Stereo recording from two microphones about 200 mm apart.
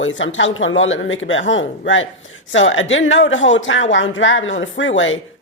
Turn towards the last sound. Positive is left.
turn(degrees=75)  # may be behind; listen again after turning